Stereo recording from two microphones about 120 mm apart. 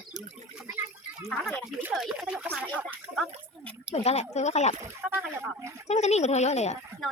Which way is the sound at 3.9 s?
65° left (ahead or behind).